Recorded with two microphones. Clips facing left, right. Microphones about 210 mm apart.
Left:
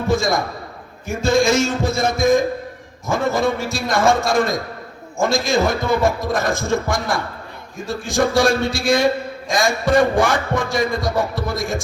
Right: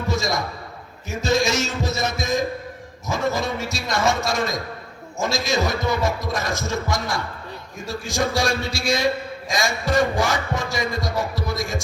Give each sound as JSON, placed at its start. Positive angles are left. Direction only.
{"t": 0.1, "sound": "a man's voice", "side_deg": 50}
{"t": 1.0, "sound": "heart sounds", "side_deg": 50}